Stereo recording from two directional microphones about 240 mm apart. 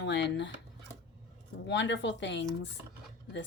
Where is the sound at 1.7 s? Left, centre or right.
Left.